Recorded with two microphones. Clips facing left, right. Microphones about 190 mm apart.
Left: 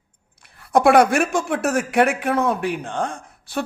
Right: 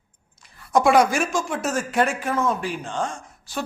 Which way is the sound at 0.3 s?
60° left (ahead or behind).